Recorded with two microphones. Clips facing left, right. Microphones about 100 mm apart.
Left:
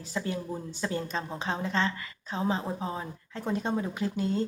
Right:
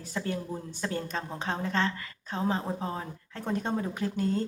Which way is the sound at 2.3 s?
20° left (ahead or behind).